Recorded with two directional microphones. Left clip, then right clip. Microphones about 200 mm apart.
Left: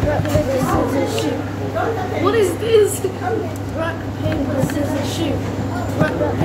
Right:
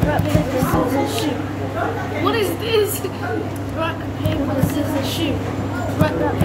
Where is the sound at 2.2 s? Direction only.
20° right (ahead or behind).